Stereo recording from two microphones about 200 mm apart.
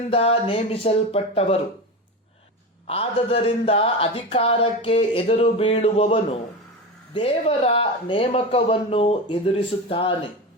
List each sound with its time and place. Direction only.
0.1 s speech: 30° left (ahead or behind)
2.8 s speech: 30° left (ahead or behind)